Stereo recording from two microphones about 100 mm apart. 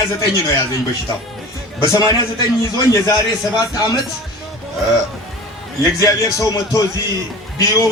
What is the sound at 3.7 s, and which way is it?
Speech, 35° left (ahead or behind).